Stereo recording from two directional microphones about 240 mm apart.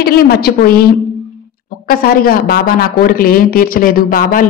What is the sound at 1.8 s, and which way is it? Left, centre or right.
Speech, left.